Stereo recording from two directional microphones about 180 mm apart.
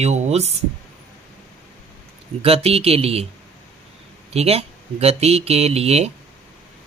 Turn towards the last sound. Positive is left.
turn(degrees=-35)  # may be behind; listen again after turning